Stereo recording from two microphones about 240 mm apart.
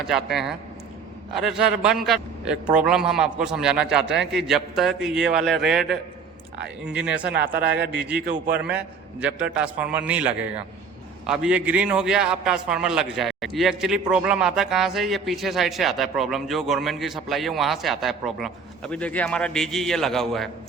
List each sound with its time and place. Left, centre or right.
0.1 s a man's voice: centre
7.7 s speech: right
9.2 s a man's voice: centre